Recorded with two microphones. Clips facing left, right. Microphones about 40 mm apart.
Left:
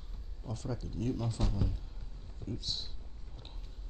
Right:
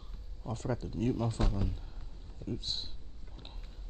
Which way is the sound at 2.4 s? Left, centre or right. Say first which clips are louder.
Right 2 dB; right.